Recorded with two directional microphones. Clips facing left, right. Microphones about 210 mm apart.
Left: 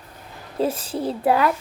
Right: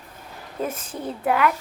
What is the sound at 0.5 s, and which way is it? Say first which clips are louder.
Speech: left 6 dB; 30° left (ahead or behind).